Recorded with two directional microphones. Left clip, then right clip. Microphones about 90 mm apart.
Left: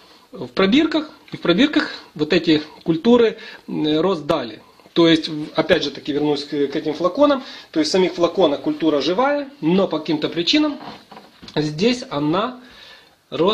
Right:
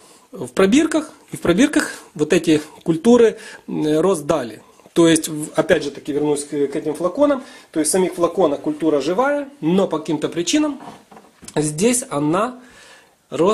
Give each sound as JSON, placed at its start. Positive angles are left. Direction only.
{"t": 0.6, "sound": "speech", "side_deg": -50}
{"t": 11.5, "sound": "speech", "side_deg": -50}